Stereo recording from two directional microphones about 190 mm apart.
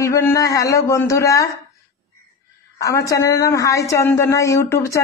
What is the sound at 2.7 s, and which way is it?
Speech, 15° left (ahead or behind).